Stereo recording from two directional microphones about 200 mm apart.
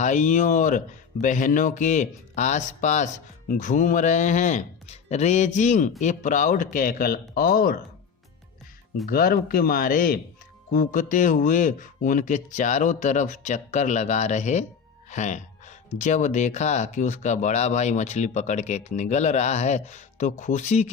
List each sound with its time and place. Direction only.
0.0 s speech: 40° left (ahead or behind)
9.0 s speech: 45° left (ahead or behind)
15.1 s music: 35° left (ahead or behind)
16.0 s speech: 35° left (ahead or behind)